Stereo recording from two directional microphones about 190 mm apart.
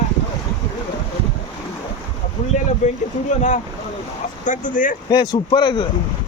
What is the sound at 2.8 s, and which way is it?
Speech, 40° left (ahead or behind).